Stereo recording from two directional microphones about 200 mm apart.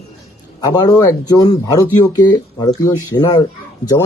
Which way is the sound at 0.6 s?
20° left (ahead or behind).